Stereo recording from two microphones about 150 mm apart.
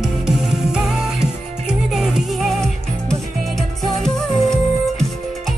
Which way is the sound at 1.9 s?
Centre (ahead or behind).